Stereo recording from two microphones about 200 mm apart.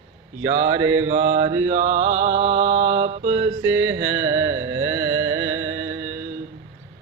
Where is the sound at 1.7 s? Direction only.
35° right (ahead or behind).